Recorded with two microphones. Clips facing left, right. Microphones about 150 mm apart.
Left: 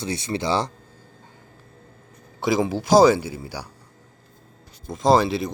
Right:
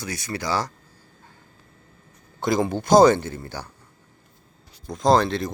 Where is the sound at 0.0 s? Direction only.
25° left (ahead or behind).